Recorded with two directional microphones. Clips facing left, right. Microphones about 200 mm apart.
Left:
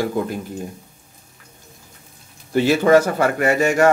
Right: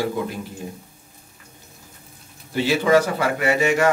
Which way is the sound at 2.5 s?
50° left (ahead or behind).